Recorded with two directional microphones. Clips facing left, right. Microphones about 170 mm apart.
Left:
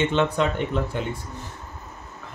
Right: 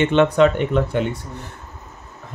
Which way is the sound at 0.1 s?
65° right (ahead or behind).